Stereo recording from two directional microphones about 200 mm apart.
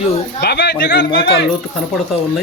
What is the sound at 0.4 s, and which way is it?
Speech, 55° left (ahead or behind).